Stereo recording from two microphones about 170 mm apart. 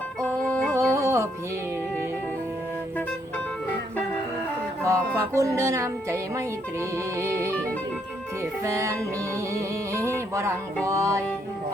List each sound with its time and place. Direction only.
0.2 s music: 5° left (ahead or behind)
0.8 s music: 15° right (ahead or behind)
4.8 s music: 20° right (ahead or behind)
7.5 s music: 10° left (ahead or behind)
8.4 s music: 15° right (ahead or behind)